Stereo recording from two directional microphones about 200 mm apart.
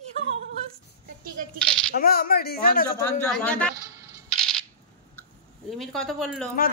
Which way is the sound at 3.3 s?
5° left (ahead or behind).